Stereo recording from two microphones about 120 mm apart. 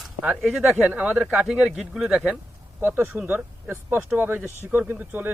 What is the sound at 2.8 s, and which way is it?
Speech, 20° right (ahead or behind).